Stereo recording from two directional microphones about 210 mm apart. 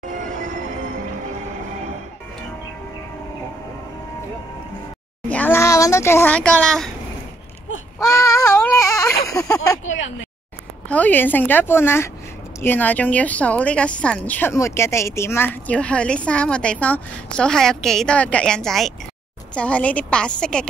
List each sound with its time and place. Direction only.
0.2 s train: 35° right (ahead or behind)
5.3 s a sound: 10° left (ahead or behind)
8.0 s a sound: 15° left (ahead or behind)
9.2 s speech: 15° left (ahead or behind)
9.8 s speech: 65° left (ahead or behind)
10.9 s a woman's voice: 10° left (ahead or behind)